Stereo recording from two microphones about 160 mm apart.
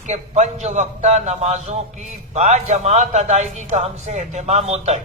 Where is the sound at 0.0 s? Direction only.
45° right (ahead or behind).